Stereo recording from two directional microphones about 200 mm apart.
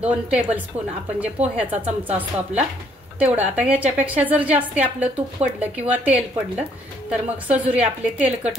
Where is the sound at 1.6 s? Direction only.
10° right (ahead or behind).